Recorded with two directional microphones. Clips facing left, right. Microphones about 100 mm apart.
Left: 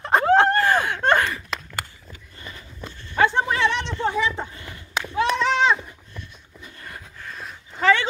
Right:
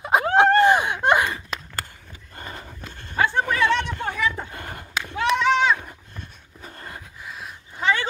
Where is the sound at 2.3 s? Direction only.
45° right (ahead or behind).